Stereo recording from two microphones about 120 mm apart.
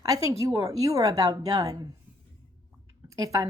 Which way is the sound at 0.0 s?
30° right (ahead or behind).